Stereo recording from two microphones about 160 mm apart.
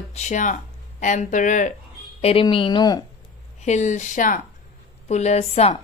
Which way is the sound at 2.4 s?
30° left (ahead or behind).